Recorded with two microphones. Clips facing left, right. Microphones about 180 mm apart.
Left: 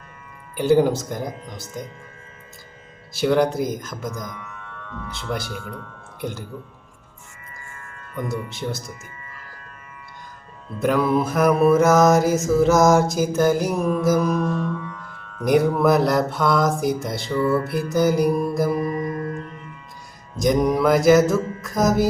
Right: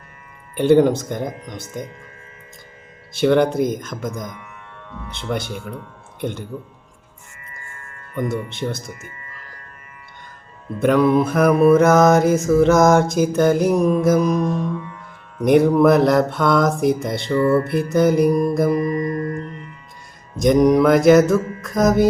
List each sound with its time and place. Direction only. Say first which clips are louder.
0.5 s mantra: right 3 dB; centre (ahead or behind)
3.2 s mantra: right 3 dB; centre (ahead or behind)
4.3 s music: left 1 dB; 15° right (ahead or behind)
5.3 s mantra: right 4 dB; centre (ahead or behind)
6.1 s speech: right 4 dB; centre (ahead or behind)
8.1 s mantra: right 4 dB; centre (ahead or behind)
10.8 s mantra: right 4 dB; centre (ahead or behind)
14.2 s mantra: right 3 dB; 15° right (ahead or behind)
15.8 s mantra: right 4 dB; centre (ahead or behind)
20.3 s mantra: right 5 dB; centre (ahead or behind)